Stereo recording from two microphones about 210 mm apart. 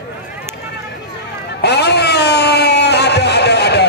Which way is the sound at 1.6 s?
50° left (ahead or behind).